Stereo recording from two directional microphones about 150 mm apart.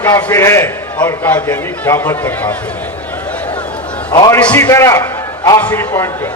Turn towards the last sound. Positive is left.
turn(degrees=15)  # may be behind; listen again after turning